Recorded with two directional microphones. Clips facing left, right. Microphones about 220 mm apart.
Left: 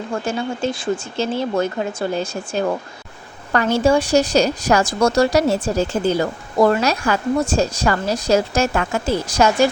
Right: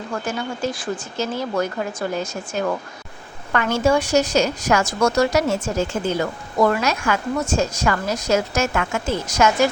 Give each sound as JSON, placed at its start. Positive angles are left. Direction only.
{"t": 0.1, "sound": "speech", "side_deg": 25}